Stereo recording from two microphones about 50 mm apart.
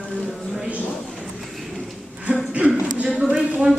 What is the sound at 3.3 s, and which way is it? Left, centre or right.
Speech, centre.